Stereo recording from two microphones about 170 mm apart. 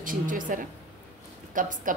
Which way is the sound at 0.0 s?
50° right (ahead or behind).